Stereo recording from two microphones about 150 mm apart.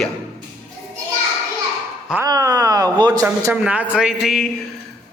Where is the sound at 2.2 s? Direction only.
25° right (ahead or behind).